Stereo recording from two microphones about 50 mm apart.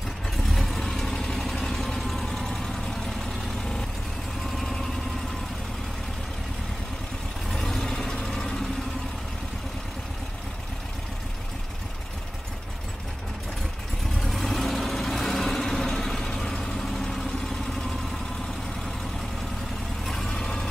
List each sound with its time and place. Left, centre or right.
0.5 s vehicle: centre
7.5 s vehicle: centre
14.2 s vehicle: centre
20.1 s vehicle: centre